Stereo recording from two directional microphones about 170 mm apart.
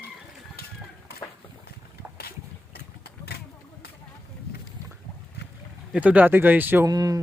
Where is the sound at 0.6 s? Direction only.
65° left (ahead or behind).